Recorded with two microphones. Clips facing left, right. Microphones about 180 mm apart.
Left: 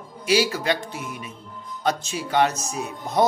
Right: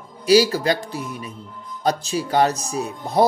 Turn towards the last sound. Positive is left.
turn(degrees=-35)  # may be behind; listen again after turning